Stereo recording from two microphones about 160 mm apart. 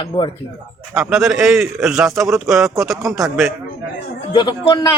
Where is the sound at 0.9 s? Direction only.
5° right (ahead or behind).